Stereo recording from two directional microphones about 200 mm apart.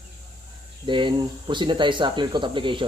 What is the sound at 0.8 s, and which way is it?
Speech, 25° right (ahead or behind).